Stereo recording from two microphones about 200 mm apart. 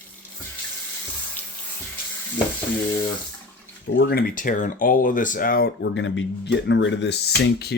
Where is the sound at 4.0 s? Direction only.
50° left (ahead or behind).